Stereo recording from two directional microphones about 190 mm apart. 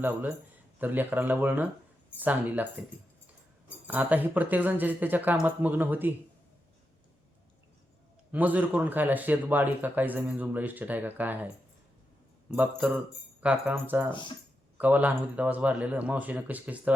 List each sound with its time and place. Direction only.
0.8 s a man's voice: 10° right (ahead or behind)
3.8 s a man's voice: 10° right (ahead or behind)
8.3 s a man's voice: 10° right (ahead or behind)
14.1 s speech: 25° left (ahead or behind)
14.8 s a man's voice: 10° right (ahead or behind)